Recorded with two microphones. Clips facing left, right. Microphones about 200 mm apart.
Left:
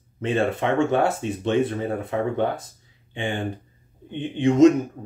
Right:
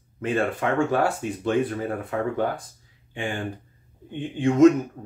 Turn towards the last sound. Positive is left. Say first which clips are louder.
# left 1 dB
turn(degrees=20)  # may be behind; listen again after turning